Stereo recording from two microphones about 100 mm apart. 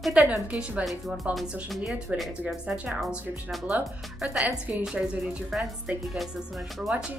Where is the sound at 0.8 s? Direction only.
Centre (ahead or behind).